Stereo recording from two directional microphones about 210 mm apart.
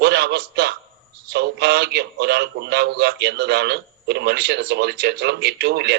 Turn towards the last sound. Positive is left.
turn(degrees=-55)  # may be behind; listen again after turning